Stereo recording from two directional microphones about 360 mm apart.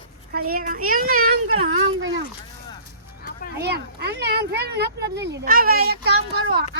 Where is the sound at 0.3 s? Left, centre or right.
Right.